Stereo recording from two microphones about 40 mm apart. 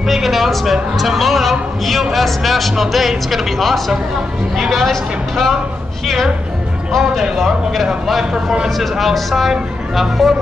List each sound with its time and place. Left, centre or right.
0.0 s a woman's voice: centre
7.0 s a woman's voice: centre